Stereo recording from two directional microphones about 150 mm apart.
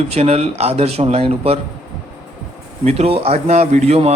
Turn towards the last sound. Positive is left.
turn(degrees=-45)  # may be behind; listen again after turning